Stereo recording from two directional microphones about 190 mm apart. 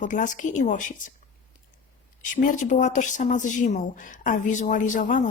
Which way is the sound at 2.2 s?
45° left (ahead or behind).